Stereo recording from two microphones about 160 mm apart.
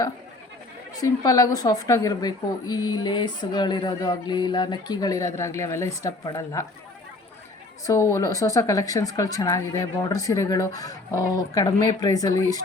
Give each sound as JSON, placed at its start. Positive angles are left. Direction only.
{"t": 0.9, "sound": "a woman's voice", "side_deg": 20}
{"t": 7.9, "sound": "a woman's voice", "side_deg": 20}